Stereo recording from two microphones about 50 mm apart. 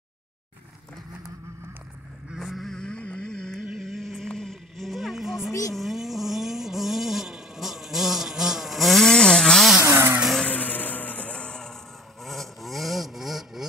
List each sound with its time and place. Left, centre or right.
2.4 s vehicle: centre
2.8 s vehicle: left
3.5 s a sound: centre
5.8 s vehicle: centre
9.8 s vehicle: right
10.4 s vehicle: left; by 11.7 s centre
12.2 s vehicle: centre